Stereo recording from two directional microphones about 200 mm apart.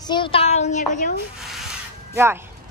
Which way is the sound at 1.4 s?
Centre (ahead or behind).